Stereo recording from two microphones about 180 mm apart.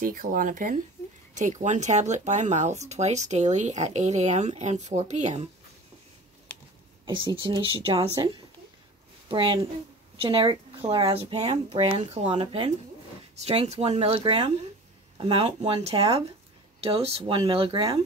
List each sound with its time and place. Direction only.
0.0 s speech: 50° right (ahead or behind)
7.1 s speech: 25° right (ahead or behind)
16.8 s speech: 30° right (ahead or behind)